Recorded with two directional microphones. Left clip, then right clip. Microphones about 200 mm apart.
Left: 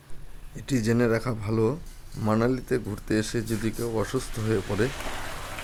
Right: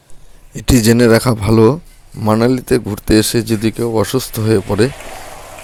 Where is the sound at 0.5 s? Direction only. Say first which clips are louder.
Right 14 dB; 40° right (ahead or behind).